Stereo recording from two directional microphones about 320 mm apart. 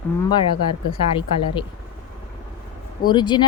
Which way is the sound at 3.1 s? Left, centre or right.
Centre.